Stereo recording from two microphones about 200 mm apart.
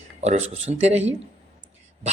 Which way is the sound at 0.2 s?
35° right (ahead or behind).